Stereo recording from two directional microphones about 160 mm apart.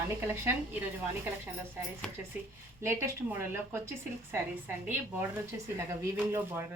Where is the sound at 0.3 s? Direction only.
15° right (ahead or behind).